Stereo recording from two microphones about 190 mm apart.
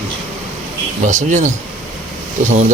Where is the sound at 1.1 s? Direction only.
40° right (ahead or behind).